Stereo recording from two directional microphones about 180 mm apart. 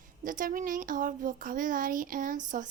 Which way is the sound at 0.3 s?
50° right (ahead or behind).